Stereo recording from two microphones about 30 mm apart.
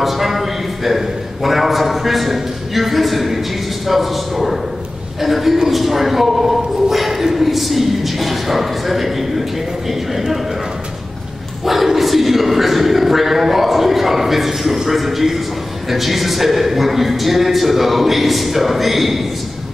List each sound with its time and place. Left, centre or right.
0.0 s a man's voice: centre
11.6 s a man's voice: centre